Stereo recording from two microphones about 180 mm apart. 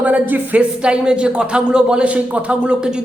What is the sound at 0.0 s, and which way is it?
Speech, 10° right (ahead or behind).